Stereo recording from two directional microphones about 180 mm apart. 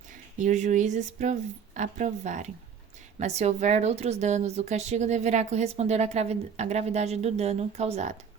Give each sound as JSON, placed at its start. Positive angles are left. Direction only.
{"t": 0.1, "sound": "a woman's voice", "side_deg": -45}